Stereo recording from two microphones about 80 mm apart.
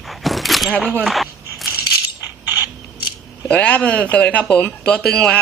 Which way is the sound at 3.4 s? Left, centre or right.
Centre.